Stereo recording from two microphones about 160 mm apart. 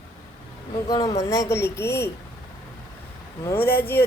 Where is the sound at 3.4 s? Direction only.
15° left (ahead or behind).